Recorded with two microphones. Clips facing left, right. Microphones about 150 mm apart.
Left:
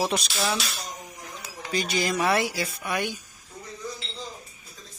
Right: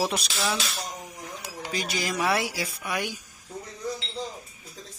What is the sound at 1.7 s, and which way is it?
Speech, 5° right (ahead or behind).